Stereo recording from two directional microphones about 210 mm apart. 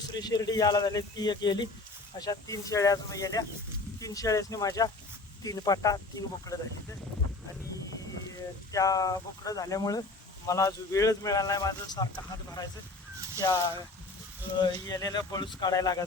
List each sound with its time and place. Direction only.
0.1 s speech: 20° left (ahead or behind)
8.7 s speech: 15° left (ahead or behind)
13.4 s speech: 20° left (ahead or behind)